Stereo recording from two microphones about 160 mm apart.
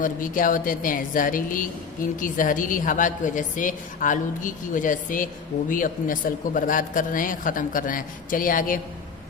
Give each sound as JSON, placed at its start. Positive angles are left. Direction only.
{"t": 0.0, "sound": "a woman's voice", "side_deg": 55}